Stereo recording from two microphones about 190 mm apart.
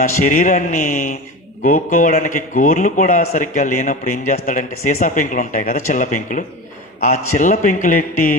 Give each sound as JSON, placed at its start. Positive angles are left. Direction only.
{"t": 0.2, "sound": "a man's voice", "side_deg": 40}